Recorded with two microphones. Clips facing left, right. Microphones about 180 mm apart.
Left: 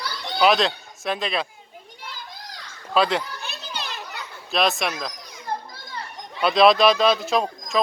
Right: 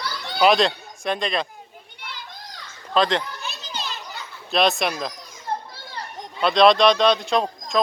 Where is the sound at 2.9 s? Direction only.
10° left (ahead or behind).